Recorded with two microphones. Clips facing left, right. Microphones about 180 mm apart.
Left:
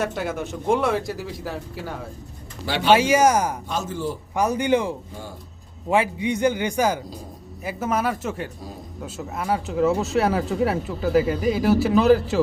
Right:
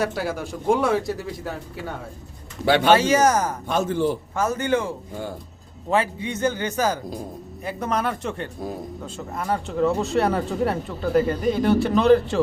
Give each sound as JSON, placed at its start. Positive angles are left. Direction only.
{"t": 0.1, "sound": "speech", "side_deg": -5}
{"t": 2.6, "sound": "speech", "side_deg": -55}
{"t": 2.9, "sound": "a man's voice", "side_deg": 10}
{"t": 3.7, "sound": "a man's voice", "side_deg": -60}
{"t": 4.4, "sound": "a man's voice", "side_deg": 15}